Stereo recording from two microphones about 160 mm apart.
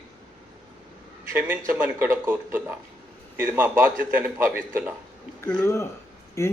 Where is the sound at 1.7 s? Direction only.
15° right (ahead or behind).